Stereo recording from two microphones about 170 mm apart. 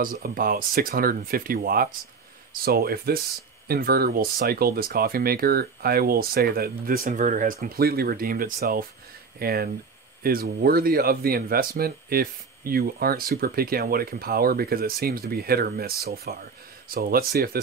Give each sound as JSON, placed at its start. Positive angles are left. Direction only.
{"t": 0.0, "sound": "speech", "side_deg": -60}